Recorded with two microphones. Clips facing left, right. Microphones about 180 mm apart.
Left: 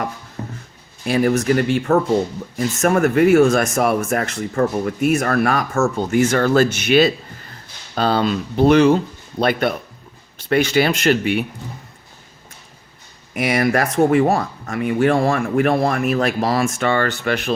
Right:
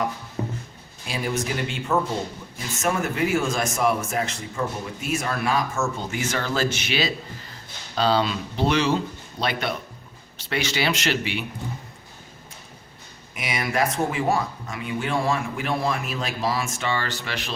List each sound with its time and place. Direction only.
0.4 s a sound: 15° right (ahead or behind)
1.0 s speech: 55° left (ahead or behind)
13.3 s speech: 60° left (ahead or behind)